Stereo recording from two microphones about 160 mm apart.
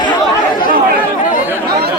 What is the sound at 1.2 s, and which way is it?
Speech, 55° left (ahead or behind).